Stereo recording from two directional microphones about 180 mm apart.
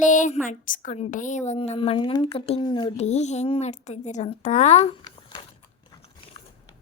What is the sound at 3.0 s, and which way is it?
A woman's voice, 40° left (ahead or behind).